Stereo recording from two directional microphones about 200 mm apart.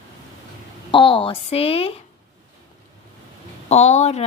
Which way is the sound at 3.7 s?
35° left (ahead or behind).